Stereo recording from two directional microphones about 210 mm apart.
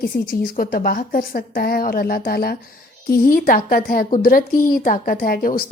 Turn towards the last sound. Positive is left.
turn(degrees=45)  # may be behind; listen again after turning